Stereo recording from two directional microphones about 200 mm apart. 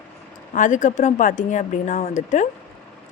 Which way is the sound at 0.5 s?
40° left (ahead or behind).